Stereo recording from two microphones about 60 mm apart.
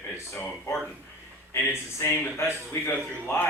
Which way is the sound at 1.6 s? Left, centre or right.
Left.